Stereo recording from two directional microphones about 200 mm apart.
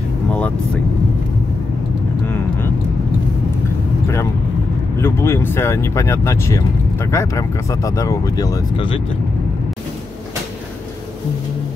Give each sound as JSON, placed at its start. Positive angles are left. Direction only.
{"t": 4.9, "sound": "speech", "side_deg": 10}